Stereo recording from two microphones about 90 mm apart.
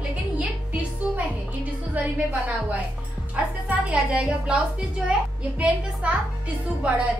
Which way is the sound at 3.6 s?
15° right (ahead or behind).